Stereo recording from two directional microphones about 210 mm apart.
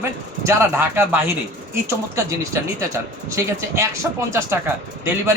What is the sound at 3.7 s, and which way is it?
Speech, 15° right (ahead or behind).